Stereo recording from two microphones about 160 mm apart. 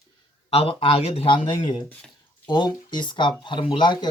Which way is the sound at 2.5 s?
30° left (ahead or behind).